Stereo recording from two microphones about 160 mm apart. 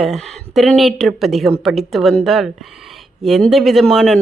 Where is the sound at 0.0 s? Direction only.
Centre (ahead or behind).